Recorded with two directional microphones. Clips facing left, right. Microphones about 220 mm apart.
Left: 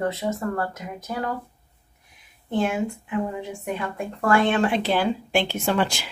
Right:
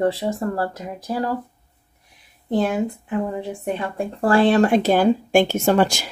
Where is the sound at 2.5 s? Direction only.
35° right (ahead or behind).